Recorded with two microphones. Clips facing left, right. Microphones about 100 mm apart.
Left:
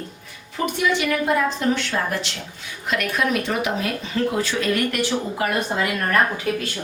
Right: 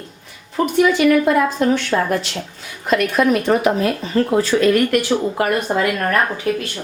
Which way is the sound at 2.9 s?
40° right (ahead or behind).